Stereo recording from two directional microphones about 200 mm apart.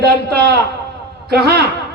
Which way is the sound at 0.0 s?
50° right (ahead or behind).